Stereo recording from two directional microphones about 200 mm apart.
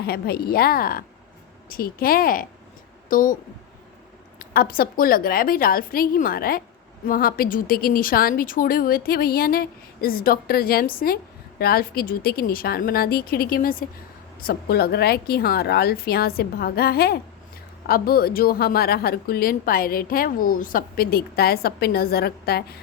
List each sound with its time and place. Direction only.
0.0 s a woman's voice: 50° left (ahead or behind)
4.4 s a woman's voice: 50° left (ahead or behind)